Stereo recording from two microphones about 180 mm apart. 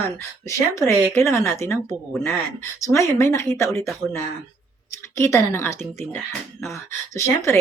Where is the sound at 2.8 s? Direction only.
15° left (ahead or behind).